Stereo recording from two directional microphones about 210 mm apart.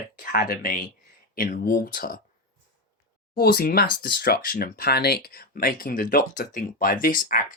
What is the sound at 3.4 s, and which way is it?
Speech, 45° left (ahead or behind).